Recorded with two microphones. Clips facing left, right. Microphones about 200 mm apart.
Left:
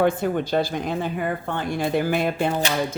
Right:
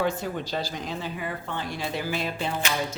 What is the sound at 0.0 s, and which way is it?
Speech, 55° left (ahead or behind).